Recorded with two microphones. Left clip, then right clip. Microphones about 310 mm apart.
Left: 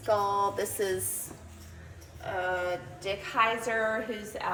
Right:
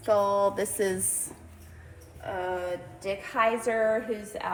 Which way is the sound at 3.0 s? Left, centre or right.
Right.